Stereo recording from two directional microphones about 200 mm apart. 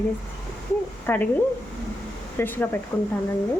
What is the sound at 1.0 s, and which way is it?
Stir, 10° left (ahead or behind).